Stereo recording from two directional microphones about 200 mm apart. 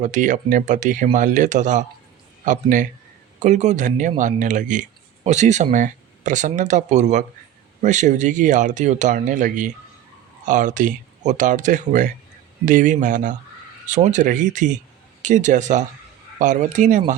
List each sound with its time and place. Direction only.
0.0 s a man's voice: 40° right (ahead or behind)